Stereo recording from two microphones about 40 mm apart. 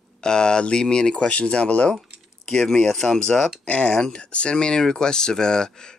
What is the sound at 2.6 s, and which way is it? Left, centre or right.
Speech, centre.